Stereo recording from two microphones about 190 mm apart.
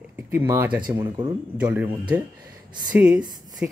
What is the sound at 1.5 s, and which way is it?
Speech, 10° right (ahead or behind).